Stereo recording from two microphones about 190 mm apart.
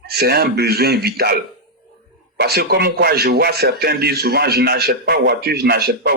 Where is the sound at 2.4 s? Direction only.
55° right (ahead or behind).